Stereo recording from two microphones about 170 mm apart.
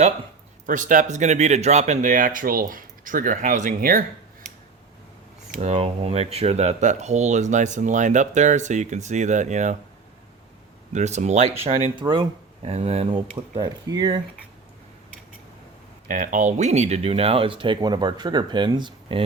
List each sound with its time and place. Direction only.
0.7 s speech: 50° right (ahead or behind)
5.5 s speech: 45° right (ahead or behind)
10.9 s speech: 45° right (ahead or behind)
11.9 s speech: 25° right (ahead or behind)
13.1 s speech: 25° right (ahead or behind)
16.0 s speech: 50° right (ahead or behind); by 19.2 s 25° right (ahead or behind)